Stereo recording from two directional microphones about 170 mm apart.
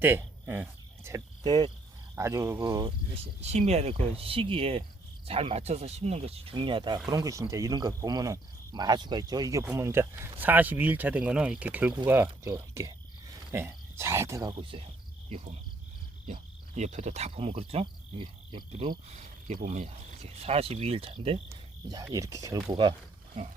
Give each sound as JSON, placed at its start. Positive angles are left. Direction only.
{"t": 0.0, "sound": "cricket", "side_deg": -10}
{"t": 2.1, "sound": "speech", "side_deg": -15}
{"t": 3.4, "sound": "speech", "side_deg": -40}
{"t": 14.5, "sound": "speech", "side_deg": -30}
{"t": 16.2, "sound": "cricket", "side_deg": -40}
{"t": 19.6, "sound": "speech", "side_deg": -45}
{"t": 21.8, "sound": "speech", "side_deg": -20}